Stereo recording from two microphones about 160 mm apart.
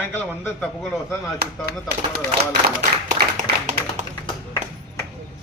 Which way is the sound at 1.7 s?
75° right (ahead or behind).